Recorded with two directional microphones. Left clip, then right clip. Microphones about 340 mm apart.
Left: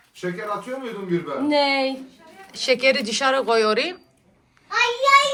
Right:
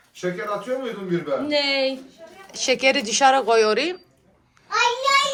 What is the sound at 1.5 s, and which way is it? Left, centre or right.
Speech, centre.